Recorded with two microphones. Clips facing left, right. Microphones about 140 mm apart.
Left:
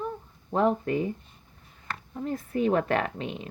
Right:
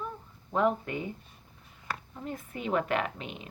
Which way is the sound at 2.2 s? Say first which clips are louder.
Left 9 dB; 40° left (ahead or behind).